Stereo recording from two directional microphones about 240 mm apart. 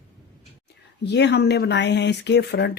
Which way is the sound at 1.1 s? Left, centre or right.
Left.